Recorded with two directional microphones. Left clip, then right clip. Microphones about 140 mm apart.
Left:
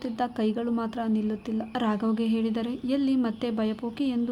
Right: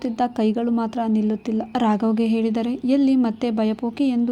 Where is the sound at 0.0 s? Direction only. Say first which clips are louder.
Right 7 dB; 30° right (ahead or behind).